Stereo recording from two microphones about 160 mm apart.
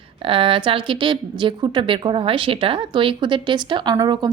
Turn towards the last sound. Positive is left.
turn(degrees=-25)  # may be behind; listen again after turning